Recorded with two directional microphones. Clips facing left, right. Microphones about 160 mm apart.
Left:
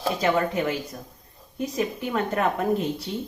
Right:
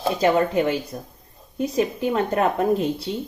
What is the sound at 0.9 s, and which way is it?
A woman's voice, 25° right (ahead or behind).